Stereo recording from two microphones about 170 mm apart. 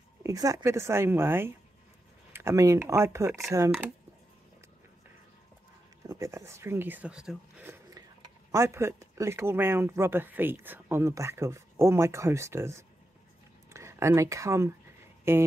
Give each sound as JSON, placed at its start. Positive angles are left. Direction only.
{"t": 0.2, "sound": "speech", "side_deg": -20}
{"t": 6.0, "sound": "speech", "side_deg": -20}